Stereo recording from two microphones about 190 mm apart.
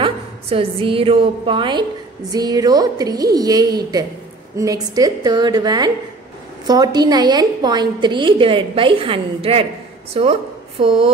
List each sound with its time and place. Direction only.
0.0 s a woman's voice: 30° right (ahead or behind)